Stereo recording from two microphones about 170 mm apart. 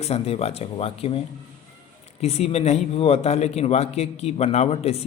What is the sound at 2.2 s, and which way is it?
Speech, 40° left (ahead or behind).